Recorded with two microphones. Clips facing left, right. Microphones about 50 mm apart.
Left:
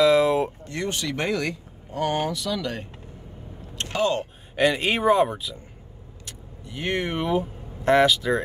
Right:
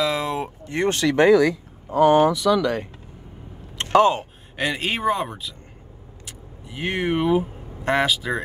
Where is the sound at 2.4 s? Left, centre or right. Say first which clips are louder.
Right 10 dB; right.